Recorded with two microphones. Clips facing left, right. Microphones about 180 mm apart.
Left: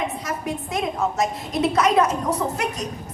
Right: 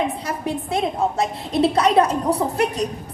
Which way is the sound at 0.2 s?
30° right (ahead or behind).